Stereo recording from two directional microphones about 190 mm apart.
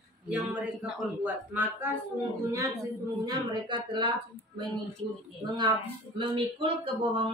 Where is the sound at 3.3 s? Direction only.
25° right (ahead or behind).